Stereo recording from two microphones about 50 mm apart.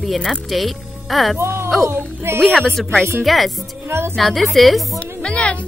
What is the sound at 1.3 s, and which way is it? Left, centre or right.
Speech, right.